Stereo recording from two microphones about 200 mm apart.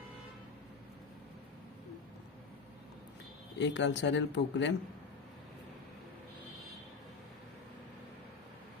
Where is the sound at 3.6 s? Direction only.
60° left (ahead or behind).